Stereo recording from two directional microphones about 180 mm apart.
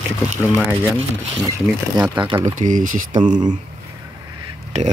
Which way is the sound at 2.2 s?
25° right (ahead or behind).